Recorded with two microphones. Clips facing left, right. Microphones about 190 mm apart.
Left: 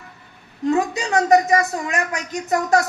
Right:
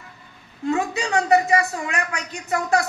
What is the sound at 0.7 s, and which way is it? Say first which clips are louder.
A woman's voice: left 3 dB; 40° left (ahead or behind).